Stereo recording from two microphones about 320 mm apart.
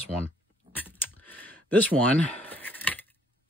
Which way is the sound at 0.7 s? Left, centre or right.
Centre.